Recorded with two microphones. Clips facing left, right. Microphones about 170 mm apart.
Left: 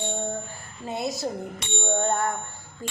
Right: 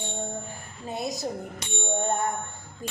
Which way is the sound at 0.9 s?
15° right (ahead or behind).